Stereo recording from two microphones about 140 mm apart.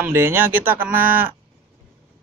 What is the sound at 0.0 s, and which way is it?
Speech, 15° right (ahead or behind).